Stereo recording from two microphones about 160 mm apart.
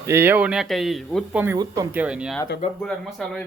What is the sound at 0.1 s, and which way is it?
Speech, 10° right (ahead or behind).